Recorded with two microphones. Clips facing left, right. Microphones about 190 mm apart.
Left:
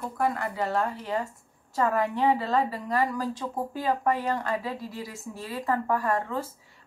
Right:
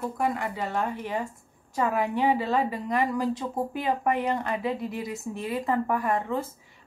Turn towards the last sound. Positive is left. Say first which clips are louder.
# right 1 dB
turn(degrees=-20)  # may be behind; listen again after turning